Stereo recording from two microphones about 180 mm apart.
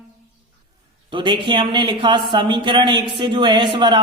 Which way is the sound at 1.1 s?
25° right (ahead or behind).